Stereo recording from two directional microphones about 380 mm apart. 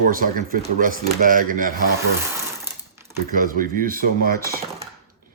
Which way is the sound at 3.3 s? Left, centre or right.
Right.